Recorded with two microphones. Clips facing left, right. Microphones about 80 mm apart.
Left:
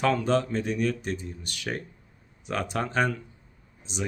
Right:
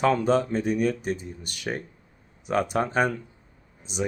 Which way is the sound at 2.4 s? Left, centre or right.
Centre.